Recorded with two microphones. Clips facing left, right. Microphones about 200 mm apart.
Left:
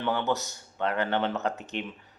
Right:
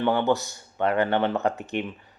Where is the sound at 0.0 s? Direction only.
55° right (ahead or behind).